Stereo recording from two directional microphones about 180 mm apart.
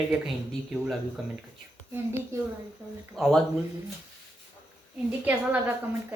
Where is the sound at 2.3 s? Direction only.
15° right (ahead or behind).